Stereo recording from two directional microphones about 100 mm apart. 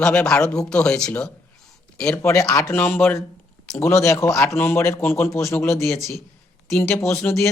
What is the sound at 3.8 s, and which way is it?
Speech, 30° left (ahead or behind).